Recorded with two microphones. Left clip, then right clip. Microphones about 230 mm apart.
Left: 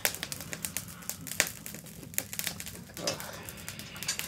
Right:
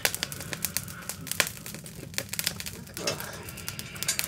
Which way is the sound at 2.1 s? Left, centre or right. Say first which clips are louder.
Right 5 dB; right.